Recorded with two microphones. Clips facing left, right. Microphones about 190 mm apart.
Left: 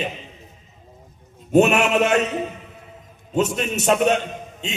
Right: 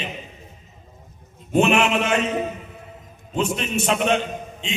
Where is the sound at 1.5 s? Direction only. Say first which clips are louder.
Left 2 dB; 45° left (ahead or behind).